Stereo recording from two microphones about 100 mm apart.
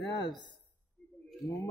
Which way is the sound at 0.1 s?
45° left (ahead or behind).